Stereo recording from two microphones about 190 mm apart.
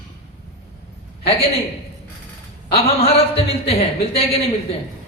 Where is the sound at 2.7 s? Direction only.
30° left (ahead or behind).